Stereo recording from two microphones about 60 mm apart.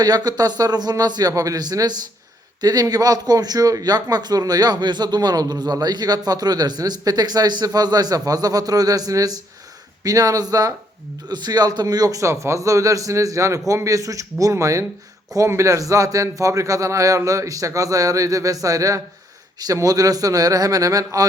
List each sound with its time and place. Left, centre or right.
0.1 s a man's voice: right
12.2 s a man's voice: right
19.5 s a man's voice: right